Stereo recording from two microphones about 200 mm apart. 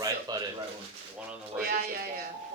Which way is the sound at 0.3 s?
20° right (ahead or behind).